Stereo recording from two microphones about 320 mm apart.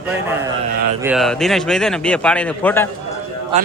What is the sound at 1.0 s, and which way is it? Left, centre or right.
A man's voice, centre.